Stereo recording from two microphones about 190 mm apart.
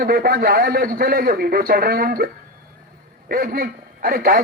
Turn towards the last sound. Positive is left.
turn(degrees=-50)  # may be behind; listen again after turning